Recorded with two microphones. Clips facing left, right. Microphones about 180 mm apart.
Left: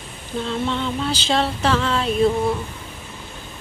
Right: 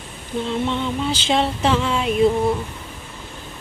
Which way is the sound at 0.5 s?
15° right (ahead or behind).